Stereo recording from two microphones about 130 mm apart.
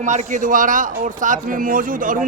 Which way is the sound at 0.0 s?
70° right (ahead or behind).